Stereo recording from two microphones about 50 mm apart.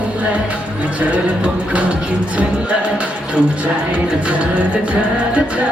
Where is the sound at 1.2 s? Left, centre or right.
Right.